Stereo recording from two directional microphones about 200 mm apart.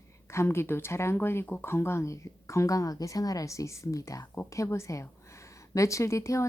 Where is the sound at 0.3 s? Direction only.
15° left (ahead or behind).